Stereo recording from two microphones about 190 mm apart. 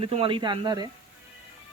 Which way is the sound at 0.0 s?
30° right (ahead or behind).